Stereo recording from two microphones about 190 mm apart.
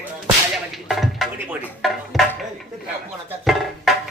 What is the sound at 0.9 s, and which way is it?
Music, centre (ahead or behind).